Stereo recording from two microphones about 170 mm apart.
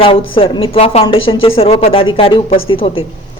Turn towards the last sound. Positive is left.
turn(degrees=35)  # may be behind; listen again after turning